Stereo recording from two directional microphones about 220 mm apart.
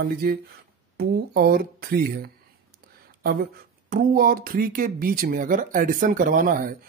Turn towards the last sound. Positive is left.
turn(degrees=-40)  # may be behind; listen again after turning